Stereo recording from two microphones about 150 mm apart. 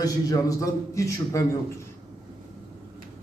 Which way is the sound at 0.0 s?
25° left (ahead or behind).